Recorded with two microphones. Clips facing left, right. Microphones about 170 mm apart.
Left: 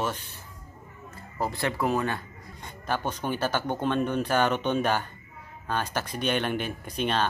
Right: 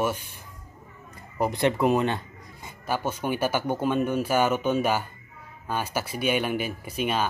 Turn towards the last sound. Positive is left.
turn(degrees=-5)  # may be behind; listen again after turning